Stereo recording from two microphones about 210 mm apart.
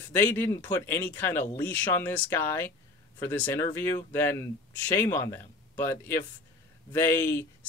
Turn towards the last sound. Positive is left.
turn(degrees=10)  # may be behind; listen again after turning